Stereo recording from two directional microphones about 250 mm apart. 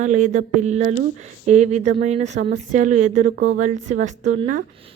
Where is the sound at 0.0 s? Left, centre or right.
Right.